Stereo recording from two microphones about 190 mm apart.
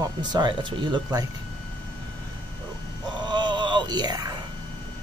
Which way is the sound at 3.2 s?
25° right (ahead or behind).